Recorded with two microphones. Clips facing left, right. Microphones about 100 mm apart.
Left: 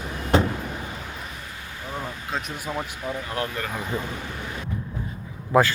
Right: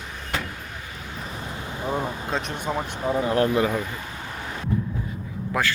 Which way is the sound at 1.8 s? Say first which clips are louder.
Right 6 dB; 20° right (ahead or behind).